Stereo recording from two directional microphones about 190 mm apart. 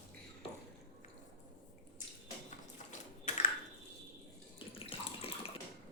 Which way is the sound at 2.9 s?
40° left (ahead or behind).